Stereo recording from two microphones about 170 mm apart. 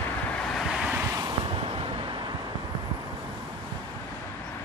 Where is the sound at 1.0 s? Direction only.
20° right (ahead or behind).